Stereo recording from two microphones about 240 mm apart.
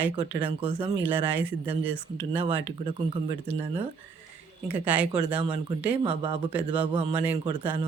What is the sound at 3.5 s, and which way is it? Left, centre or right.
Speech, right.